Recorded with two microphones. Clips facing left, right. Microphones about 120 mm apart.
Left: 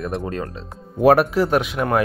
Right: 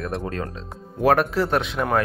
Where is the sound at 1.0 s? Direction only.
15° left (ahead or behind).